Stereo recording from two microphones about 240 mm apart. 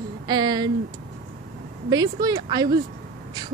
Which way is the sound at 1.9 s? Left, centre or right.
Centre.